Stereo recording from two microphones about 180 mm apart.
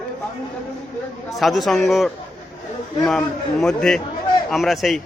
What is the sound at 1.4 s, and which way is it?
A man's voice, centre (ahead or behind).